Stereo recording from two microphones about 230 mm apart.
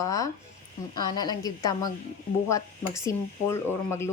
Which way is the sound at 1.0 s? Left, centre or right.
Centre.